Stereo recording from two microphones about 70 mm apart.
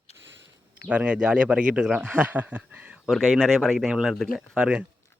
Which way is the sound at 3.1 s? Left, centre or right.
Centre.